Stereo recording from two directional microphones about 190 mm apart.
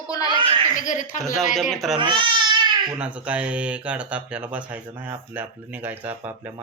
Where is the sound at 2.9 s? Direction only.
5° right (ahead or behind).